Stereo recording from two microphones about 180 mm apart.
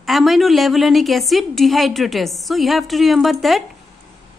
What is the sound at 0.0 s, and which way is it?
A woman's voice, centre (ahead or behind).